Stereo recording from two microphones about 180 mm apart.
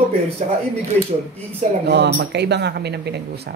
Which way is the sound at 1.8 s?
70° right (ahead or behind).